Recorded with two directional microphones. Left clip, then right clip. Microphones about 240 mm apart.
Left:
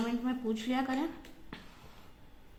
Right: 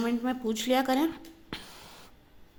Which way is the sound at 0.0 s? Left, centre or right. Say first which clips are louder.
Right 5 dB; right.